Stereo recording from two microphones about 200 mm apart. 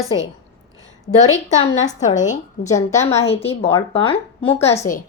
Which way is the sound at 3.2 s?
30° left (ahead or behind).